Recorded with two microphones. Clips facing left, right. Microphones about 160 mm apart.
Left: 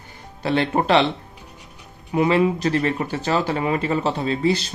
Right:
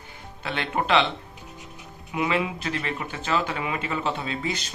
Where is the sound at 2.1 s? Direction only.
40° left (ahead or behind).